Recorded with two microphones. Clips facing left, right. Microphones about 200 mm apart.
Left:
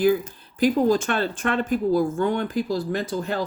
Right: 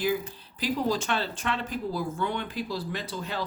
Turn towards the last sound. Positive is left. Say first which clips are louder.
# left 8 dB
turn(degrees=50)  # may be behind; listen again after turning